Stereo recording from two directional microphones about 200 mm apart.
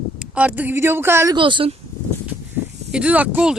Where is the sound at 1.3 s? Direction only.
25° right (ahead or behind).